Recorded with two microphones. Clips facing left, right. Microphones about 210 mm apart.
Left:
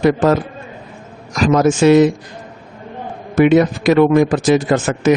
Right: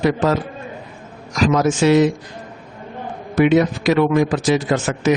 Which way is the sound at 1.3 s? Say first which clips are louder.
Left 3 dB; 50° left (ahead or behind).